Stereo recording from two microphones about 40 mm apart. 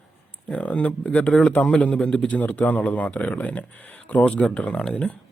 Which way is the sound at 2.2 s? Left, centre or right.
Left.